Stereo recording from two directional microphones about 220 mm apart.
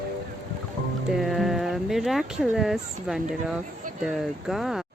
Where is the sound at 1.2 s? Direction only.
Centre (ahead or behind).